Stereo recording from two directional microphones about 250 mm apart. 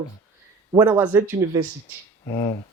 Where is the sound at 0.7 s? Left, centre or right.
Centre.